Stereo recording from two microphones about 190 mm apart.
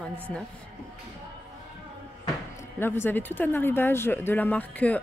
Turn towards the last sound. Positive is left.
turn(degrees=10)  # may be behind; listen again after turning